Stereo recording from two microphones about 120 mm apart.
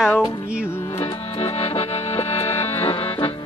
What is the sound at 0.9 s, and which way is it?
Accordion, 55° left (ahead or behind).